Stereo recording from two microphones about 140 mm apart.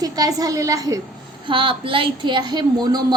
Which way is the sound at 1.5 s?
40° right (ahead or behind).